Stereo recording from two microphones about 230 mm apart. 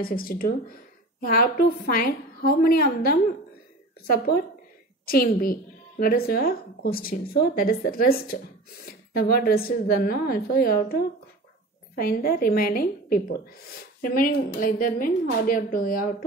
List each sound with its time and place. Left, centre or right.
0.0 s a woman's voice: left